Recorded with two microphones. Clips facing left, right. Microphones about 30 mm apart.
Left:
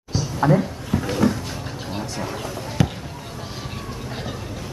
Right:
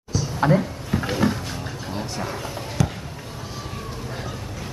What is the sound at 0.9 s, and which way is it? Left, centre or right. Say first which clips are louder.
Cupboard open or close: left 1 dB; right.